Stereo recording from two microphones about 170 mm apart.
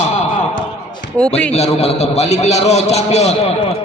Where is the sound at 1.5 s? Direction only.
40° left (ahead or behind).